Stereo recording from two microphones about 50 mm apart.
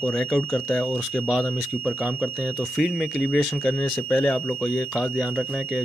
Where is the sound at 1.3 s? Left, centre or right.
Centre.